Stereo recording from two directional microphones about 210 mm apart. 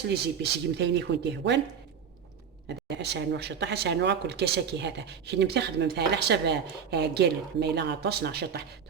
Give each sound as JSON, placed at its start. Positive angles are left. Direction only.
{"t": 0.1, "sound": "speech", "side_deg": -50}
{"t": 2.6, "sound": "speech", "side_deg": -55}